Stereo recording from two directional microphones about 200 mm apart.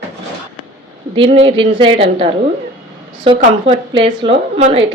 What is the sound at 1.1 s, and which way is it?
A woman's voice, 25° right (ahead or behind).